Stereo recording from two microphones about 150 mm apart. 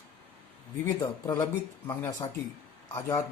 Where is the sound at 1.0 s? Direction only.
25° left (ahead or behind).